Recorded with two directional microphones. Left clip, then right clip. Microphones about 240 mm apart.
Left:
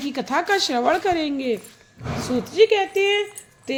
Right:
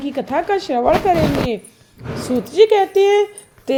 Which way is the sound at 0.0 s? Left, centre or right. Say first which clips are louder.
Right 3 dB; centre.